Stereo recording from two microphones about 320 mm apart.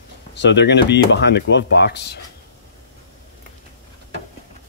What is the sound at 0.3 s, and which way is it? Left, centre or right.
Speech, left.